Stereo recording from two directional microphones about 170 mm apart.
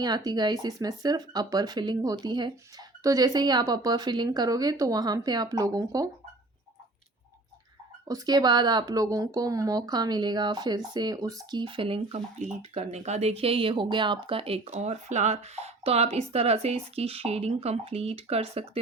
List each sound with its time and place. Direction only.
0.3 s speech: 25° right (ahead or behind)
8.0 s speech: 20° right (ahead or behind)